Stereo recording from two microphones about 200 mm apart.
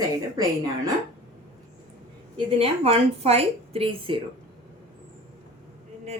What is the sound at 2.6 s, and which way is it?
A woman's voice, 30° right (ahead or behind).